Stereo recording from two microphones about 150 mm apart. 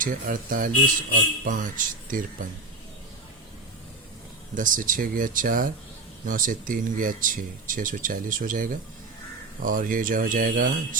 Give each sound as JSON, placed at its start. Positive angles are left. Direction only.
{"t": 0.0, "sound": "speech", "side_deg": -65}
{"t": 4.5, "sound": "speech", "side_deg": -65}